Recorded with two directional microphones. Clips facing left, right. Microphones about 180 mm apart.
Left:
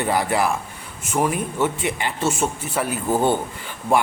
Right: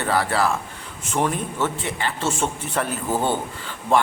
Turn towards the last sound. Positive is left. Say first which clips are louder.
# even
turn(degrees=10)  # may be behind; listen again after turning